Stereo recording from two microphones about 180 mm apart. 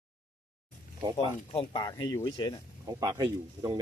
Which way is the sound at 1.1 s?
25° left (ahead or behind).